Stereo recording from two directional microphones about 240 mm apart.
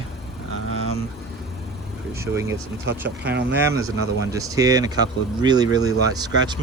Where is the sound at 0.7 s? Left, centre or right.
Right.